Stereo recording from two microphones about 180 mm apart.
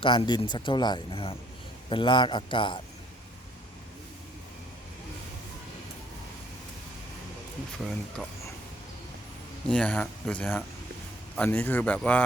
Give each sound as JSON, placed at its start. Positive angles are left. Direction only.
{"t": 0.0, "sound": "a man's voice", "side_deg": 30}
{"t": 9.6, "sound": "speech", "side_deg": 5}